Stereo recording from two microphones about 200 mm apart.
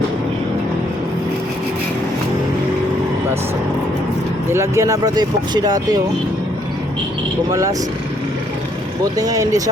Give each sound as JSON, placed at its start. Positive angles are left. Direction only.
{"t": 4.5, "sound": "speech", "side_deg": -15}
{"t": 7.5, "sound": "speech", "side_deg": -15}
{"t": 9.1, "sound": "speech", "side_deg": -15}